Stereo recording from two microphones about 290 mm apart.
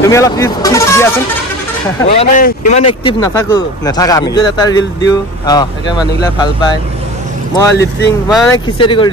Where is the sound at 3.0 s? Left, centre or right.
Centre.